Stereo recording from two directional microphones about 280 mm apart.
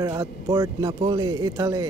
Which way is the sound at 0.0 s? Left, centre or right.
Centre.